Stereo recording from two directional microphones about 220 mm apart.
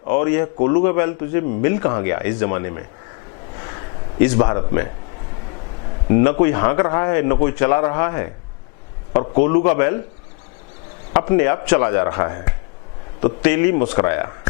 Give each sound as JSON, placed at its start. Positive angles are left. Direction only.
{"t": 0.1, "sound": "a man's voice", "side_deg": 15}
{"t": 4.4, "sound": "speech", "side_deg": 20}
{"t": 6.1, "sound": "speech", "side_deg": 15}
{"t": 9.4, "sound": "speech", "side_deg": 15}
{"t": 11.1, "sound": "speech", "side_deg": 15}